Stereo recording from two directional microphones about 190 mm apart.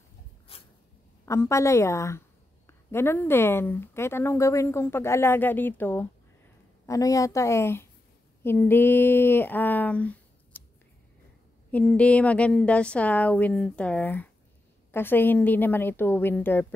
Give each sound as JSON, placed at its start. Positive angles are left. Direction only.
{"t": 0.5, "sound": "a sound", "side_deg": 30}
{"t": 1.2, "sound": "a woman's voice", "side_deg": 15}
{"t": 11.7, "sound": "a woman's voice", "side_deg": 5}